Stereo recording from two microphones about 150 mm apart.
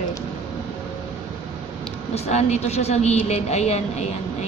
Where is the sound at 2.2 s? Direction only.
50° left (ahead or behind).